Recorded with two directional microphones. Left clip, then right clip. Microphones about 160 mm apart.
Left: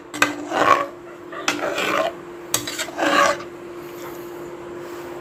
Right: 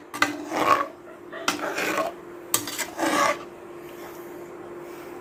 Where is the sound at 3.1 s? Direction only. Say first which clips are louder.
Left 6 dB; 10° right (ahead or behind).